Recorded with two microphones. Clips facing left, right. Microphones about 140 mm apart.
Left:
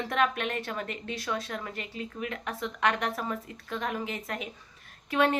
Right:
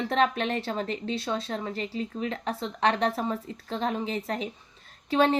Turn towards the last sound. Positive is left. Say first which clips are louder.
# right 3 dB
turn(degrees=-30)  # may be behind; listen again after turning